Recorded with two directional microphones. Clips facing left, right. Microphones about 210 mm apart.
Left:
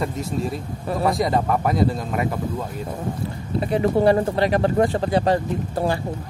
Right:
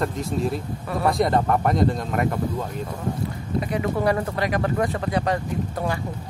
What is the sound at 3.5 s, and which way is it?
Speech, 30° left (ahead or behind).